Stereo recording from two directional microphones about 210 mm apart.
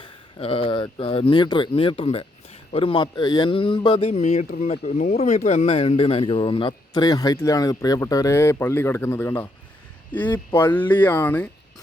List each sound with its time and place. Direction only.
0.0 s a man's voice: 25° left (ahead or behind); by 11.5 s 10° left (ahead or behind)